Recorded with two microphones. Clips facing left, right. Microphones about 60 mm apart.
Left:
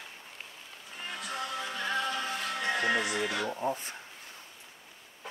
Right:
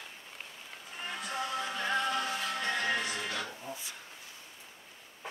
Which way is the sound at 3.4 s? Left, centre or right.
Left.